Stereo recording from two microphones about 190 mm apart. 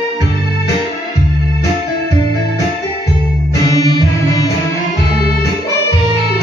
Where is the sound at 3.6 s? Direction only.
20° left (ahead or behind).